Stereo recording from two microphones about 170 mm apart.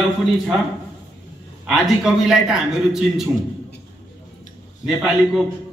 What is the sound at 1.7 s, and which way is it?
Speech, centre (ahead or behind).